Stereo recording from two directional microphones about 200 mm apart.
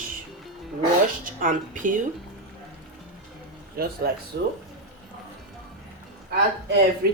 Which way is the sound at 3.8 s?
50° right (ahead or behind).